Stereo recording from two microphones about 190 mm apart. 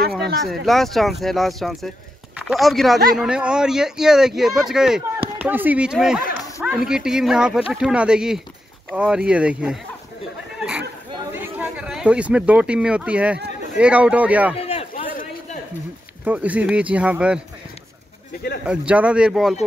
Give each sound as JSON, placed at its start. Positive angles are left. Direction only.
{"t": 0.4, "sound": "speech", "side_deg": 0}
{"t": 11.3, "sound": "speech", "side_deg": -10}
{"t": 14.6, "sound": "a sound", "side_deg": 30}
{"t": 16.3, "sound": "speech", "side_deg": -5}
{"t": 18.7, "sound": "speech", "side_deg": -5}